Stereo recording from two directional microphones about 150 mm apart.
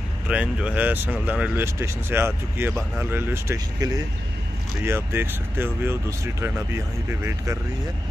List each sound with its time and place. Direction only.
0.3 s speech: 10° right (ahead or behind)